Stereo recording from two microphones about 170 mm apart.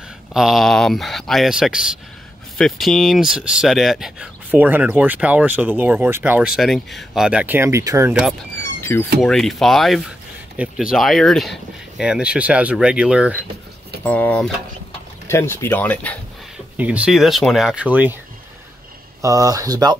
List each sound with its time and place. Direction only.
0.3 s speech: centre (ahead or behind); by 8.1 s 15° right (ahead or behind)
8.1 s speech: centre (ahead or behind)
8.9 s speech: 15° left (ahead or behind)
9.2 s speech: centre (ahead or behind)
14.0 s speech: 10° left (ahead or behind)
16.7 s speech: 10° right (ahead or behind)
19.2 s speech: 20° right (ahead or behind)